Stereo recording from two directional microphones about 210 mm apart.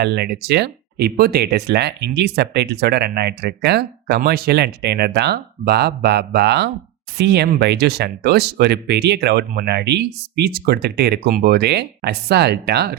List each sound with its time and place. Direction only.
0.0 s speech: 50° right (ahead or behind)